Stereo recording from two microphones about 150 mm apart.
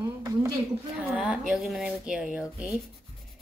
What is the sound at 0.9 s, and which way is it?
Speech, 5° right (ahead or behind).